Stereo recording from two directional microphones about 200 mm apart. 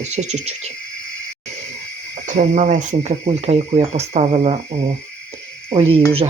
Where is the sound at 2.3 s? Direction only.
40° right (ahead or behind).